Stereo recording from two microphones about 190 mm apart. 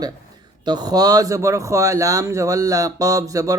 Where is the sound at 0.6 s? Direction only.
20° right (ahead or behind).